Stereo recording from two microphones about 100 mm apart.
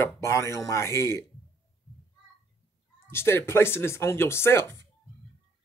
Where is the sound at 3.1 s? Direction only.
25° left (ahead or behind).